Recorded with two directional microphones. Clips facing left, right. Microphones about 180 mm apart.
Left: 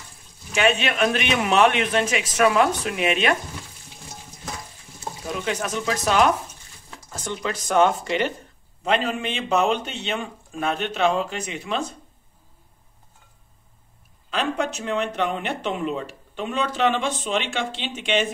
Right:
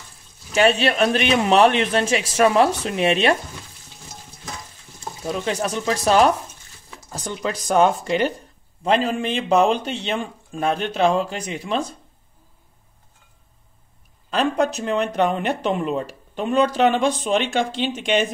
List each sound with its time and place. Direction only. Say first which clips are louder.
0.6 s speech: right 4 dB; 35° right (ahead or behind)
5.4 s speech: right 2 dB; 35° right (ahead or behind)
14.3 s speech: right 5 dB; 40° right (ahead or behind)